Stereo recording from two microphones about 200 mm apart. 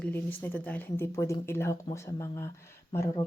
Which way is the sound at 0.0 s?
10° left (ahead or behind).